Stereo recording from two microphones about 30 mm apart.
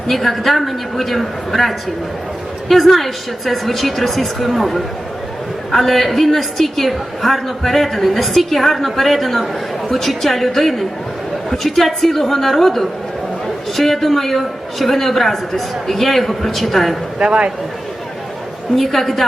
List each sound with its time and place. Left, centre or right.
0.1 s a woman's voice: centre
17.2 s speech: right
18.8 s a woman's voice: centre